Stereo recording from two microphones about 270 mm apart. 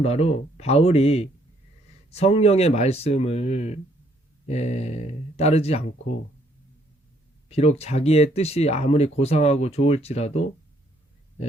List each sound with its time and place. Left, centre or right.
0.0 s speech: left
7.5 s speech: left